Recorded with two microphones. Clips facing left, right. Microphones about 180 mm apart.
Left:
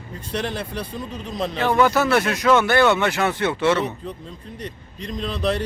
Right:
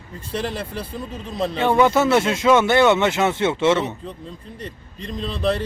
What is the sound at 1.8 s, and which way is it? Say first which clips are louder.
Speech: right 2 dB; 25° right (ahead or behind).